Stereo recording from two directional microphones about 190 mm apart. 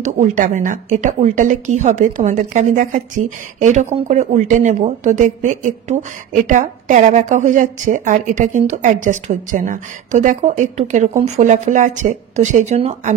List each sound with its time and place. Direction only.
0.0 s a woman's voice: 40° right (ahead or behind)